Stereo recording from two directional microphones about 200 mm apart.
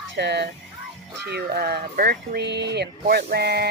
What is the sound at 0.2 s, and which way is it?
Speech, 60° right (ahead or behind).